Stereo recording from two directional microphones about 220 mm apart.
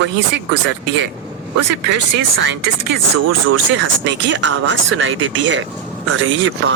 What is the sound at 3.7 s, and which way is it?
Speech, 55° right (ahead or behind).